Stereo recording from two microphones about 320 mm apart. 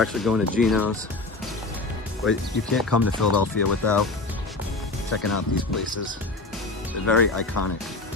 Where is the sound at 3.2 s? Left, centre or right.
Left.